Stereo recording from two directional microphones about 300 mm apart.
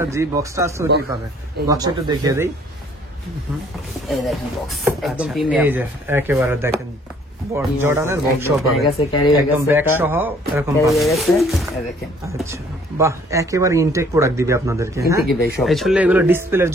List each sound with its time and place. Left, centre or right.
0.1 s speech: centre
4.1 s speech: centre
8.9 s speech: centre
9.6 s speech: centre